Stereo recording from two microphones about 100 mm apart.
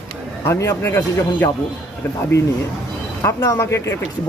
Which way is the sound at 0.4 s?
25° left (ahead or behind).